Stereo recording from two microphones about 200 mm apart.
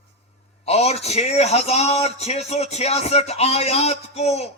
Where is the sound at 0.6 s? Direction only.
30° left (ahead or behind).